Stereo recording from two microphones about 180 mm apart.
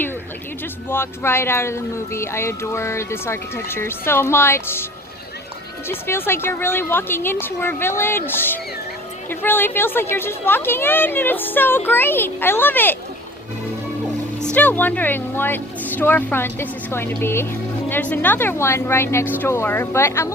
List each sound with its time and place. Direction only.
0.9 s speech: 15° left (ahead or behind)
5.9 s speech: 10° left (ahead or behind)
14.4 s speech: 10° left (ahead or behind)